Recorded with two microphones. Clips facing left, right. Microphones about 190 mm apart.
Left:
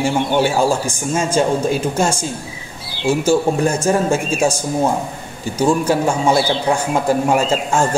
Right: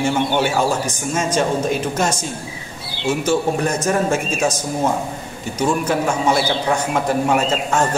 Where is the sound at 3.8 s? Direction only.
30° left (ahead or behind).